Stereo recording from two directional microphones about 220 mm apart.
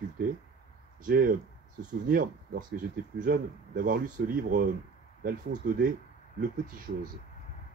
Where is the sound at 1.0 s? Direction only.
40° right (ahead or behind).